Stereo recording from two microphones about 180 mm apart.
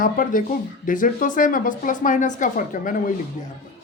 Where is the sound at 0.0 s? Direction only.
50° left (ahead or behind).